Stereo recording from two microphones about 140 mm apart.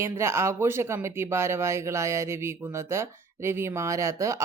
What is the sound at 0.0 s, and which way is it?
Speech, 20° right (ahead or behind).